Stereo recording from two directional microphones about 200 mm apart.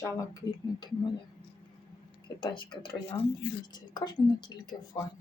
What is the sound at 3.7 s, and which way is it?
Speech, 20° left (ahead or behind).